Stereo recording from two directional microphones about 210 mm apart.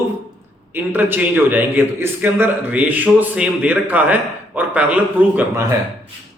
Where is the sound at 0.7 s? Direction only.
10° right (ahead or behind).